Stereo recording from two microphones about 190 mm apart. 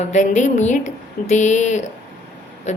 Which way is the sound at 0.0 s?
40° left (ahead or behind).